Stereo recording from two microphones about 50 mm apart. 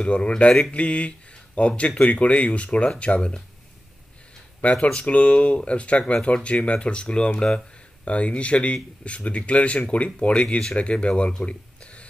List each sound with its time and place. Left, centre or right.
0.0 s speech: left
4.7 s speech: centre
5.1 s speech: left